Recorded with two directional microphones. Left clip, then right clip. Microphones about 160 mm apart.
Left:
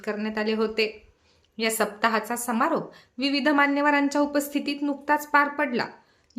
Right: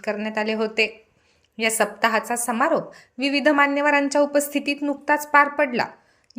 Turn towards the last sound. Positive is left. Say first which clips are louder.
# right 5 dB
turn(degrees=-20)  # may be behind; listen again after turning